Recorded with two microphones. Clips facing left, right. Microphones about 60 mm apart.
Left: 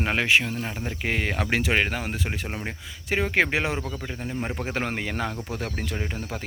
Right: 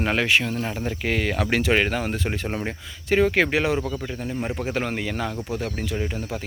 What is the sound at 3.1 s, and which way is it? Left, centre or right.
Speech, centre.